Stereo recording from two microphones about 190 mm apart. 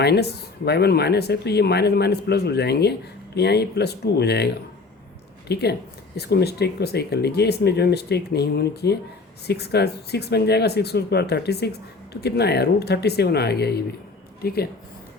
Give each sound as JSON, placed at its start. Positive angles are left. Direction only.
{"t": 0.0, "sound": "speech", "side_deg": 60}